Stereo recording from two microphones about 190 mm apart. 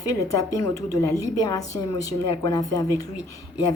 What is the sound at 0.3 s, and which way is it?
A woman's voice, 15° left (ahead or behind).